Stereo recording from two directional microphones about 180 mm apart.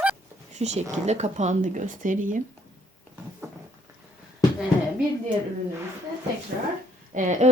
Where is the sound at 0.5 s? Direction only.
40° right (ahead or behind).